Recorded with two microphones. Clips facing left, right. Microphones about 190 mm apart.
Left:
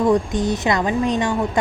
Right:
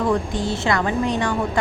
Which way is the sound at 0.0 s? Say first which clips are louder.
Left 4 dB; 20° left (ahead or behind).